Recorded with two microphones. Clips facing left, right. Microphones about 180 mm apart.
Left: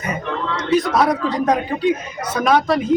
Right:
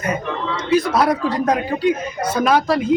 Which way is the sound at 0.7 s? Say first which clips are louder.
Even; centre (ahead or behind).